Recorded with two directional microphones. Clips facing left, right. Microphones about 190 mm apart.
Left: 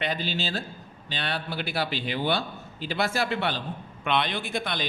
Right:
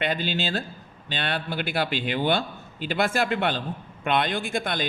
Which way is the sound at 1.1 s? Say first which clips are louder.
Right 3 dB; 55° right (ahead or behind).